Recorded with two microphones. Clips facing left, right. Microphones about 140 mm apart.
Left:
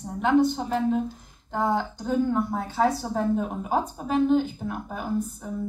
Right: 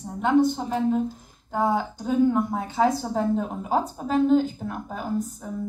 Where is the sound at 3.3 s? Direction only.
35° right (ahead or behind).